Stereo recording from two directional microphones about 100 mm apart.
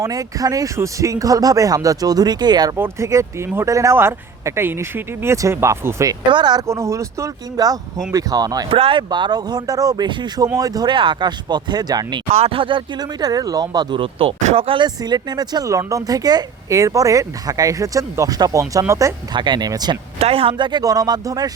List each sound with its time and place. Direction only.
0.0 s speech: 35° right (ahead or behind)
2.7 s speech: 25° right (ahead or behind)
6.3 s speech: 45° right (ahead or behind)
6.7 s speech: 30° right (ahead or behind)
8.7 s speech: 65° right (ahead or behind)
9.0 s speech: 45° right (ahead or behind)
10.9 s speech: 55° right (ahead or behind)
12.3 s speech: 80° right; by 14.0 s 40° right (ahead or behind)
14.0 s speech: 70° right (ahead or behind)
14.8 s speech: 45° right (ahead or behind)
19.3 s speech: 50° right (ahead or behind)
20.1 s speech: 75° right (ahead or behind); by 21.5 s 40° right (ahead or behind)